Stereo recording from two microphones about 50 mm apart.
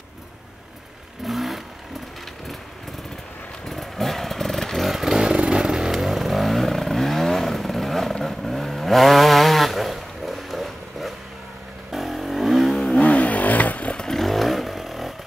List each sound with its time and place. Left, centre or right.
1.2 s vehicle: centre
3.6 s motorcycle: centre
11.9 s vehicle: centre
13.0 s vehicle: left
13.9 s vehicle: centre